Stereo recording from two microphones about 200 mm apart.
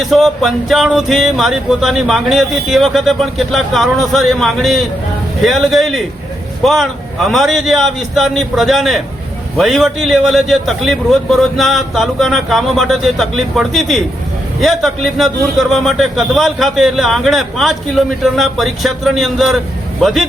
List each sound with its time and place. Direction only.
0.0 s a man's voice: centre (ahead or behind)